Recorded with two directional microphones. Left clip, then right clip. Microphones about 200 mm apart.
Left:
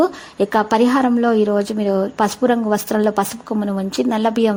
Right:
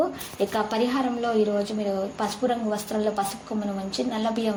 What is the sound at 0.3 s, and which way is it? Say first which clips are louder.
A woman's voice: left 9 dB; 45° left (ahead or behind).